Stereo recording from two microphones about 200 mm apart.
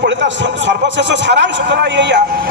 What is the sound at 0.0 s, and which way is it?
A man's voice, 65° right (ahead or behind).